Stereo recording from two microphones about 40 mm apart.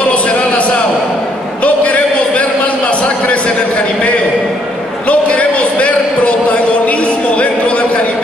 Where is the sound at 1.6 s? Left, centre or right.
Left.